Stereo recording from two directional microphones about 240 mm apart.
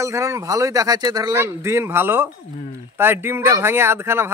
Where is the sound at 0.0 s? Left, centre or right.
Centre.